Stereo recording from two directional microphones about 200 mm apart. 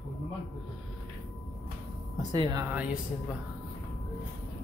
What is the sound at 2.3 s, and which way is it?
Speech, 20° right (ahead or behind).